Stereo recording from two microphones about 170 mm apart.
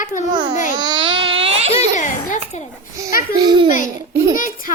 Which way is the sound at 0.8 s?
25° right (ahead or behind).